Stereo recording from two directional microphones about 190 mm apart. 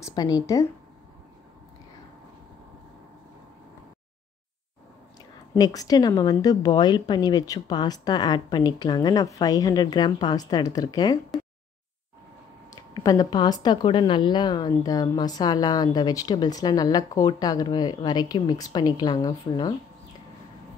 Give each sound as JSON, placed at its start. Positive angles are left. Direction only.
{"t": 0.0, "sound": "a woman's voice", "side_deg": 20}
{"t": 5.5, "sound": "a woman's voice", "side_deg": 20}
{"t": 12.7, "sound": "a woman's voice", "side_deg": 20}